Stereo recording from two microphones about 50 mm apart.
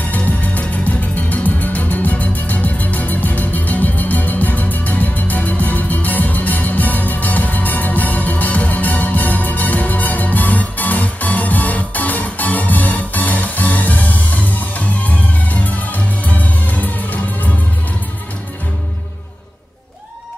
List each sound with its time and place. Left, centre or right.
0.1 s music: left